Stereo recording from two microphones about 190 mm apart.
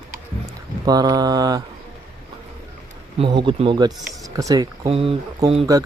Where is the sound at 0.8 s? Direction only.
20° right (ahead or behind).